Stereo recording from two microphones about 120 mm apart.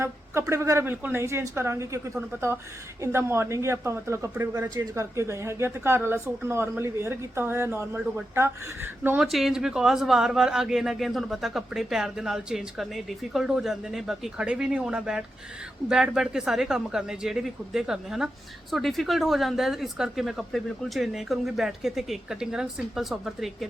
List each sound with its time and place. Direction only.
0.0 s a woman's voice: 25° right (ahead or behind)
9.1 s a man's voice: centre (ahead or behind)